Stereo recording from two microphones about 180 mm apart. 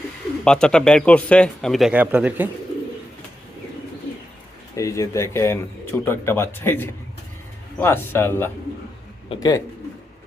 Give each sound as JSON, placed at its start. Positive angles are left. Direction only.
{"t": 0.4, "sound": "a man's voice", "side_deg": 5}
{"t": 4.7, "sound": "speech", "side_deg": 15}
{"t": 9.3, "sound": "speech", "side_deg": 25}